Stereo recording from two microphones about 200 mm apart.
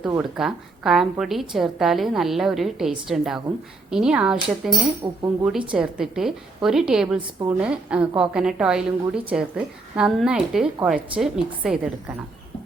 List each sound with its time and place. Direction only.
0.2 s a woman's voice: centre (ahead or behind)
5.0 s speech: 20° right (ahead or behind)
5.5 s a woman's voice: 5° right (ahead or behind)